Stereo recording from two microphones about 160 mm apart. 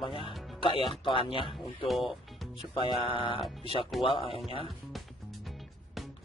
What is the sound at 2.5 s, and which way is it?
Speech, 30° left (ahead or behind).